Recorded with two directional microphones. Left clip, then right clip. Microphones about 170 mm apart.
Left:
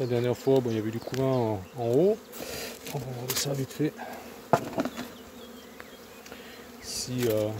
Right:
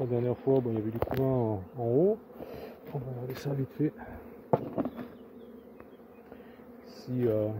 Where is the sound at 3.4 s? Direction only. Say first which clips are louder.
Left 2 dB; 5° right (ahead or behind).